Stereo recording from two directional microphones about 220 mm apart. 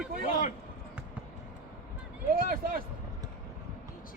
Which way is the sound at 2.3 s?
40° right (ahead or behind).